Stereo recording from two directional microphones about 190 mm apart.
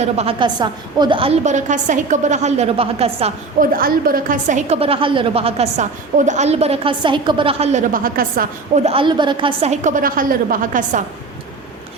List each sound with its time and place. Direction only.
0.0 s a woman's voice: 30° right (ahead or behind)
1.5 s a woman's voice: 40° right (ahead or behind)
3.6 s a woman's voice: 50° right (ahead or behind)
8.8 s a woman's voice: 30° right (ahead or behind)